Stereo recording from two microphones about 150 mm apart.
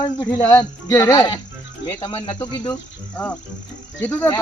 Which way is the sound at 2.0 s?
35° left (ahead or behind).